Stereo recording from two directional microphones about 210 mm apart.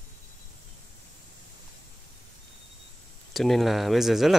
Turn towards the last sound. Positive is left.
turn(degrees=0)  # may be behind; listen again after turning